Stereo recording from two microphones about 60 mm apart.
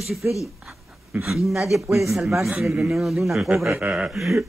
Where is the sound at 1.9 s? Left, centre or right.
Right.